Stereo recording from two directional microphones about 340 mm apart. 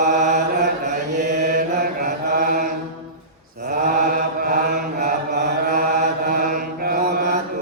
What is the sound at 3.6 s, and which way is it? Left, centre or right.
Mantra, right.